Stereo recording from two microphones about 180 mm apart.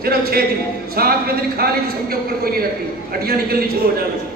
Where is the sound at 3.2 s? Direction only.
60° right (ahead or behind).